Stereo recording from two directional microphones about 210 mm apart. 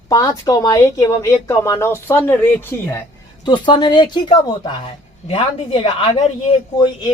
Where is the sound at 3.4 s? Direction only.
20° left (ahead or behind).